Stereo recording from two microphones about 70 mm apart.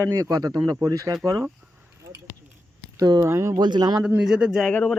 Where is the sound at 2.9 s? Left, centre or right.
Right.